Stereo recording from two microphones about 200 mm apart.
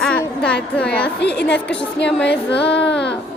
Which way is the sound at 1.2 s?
60° left (ahead or behind).